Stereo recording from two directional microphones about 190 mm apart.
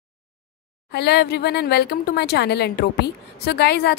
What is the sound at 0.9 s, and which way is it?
Speech, 60° left (ahead or behind).